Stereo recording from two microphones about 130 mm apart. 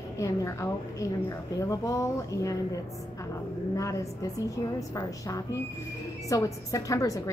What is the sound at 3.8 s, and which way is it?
A woman's voice, 25° left (ahead or behind).